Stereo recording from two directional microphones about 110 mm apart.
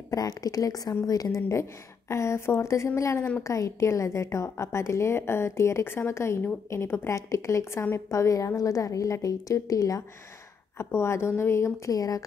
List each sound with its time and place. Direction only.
0.1 s a woman's voice: 30° left (ahead or behind)